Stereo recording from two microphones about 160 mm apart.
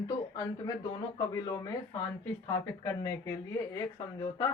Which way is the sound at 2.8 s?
15° left (ahead or behind).